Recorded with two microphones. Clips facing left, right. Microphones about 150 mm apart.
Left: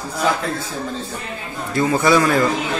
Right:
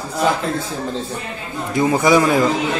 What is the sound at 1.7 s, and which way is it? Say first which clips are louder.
Speech: right 1 dB; 15° right (ahead or behind).